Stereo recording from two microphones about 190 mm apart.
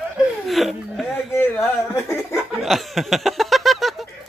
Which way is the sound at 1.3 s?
10° left (ahead or behind).